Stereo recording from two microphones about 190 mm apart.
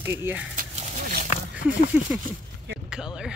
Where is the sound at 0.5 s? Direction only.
40° right (ahead or behind).